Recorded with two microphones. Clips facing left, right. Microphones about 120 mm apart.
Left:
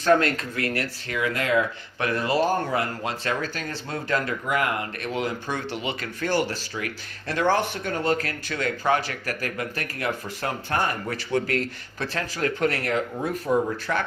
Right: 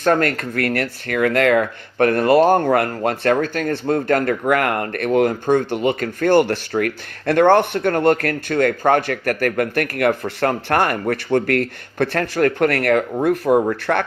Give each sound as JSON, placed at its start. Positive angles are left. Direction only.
{"t": 0.0, "sound": "speech", "side_deg": -50}